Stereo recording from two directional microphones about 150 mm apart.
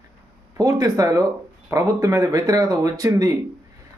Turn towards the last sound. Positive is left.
turn(degrees=-20)  # may be behind; listen again after turning